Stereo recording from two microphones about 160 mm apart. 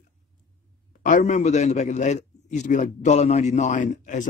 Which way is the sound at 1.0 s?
50° left (ahead or behind).